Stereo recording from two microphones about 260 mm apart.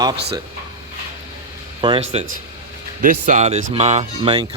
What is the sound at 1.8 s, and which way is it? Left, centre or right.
Speech, right.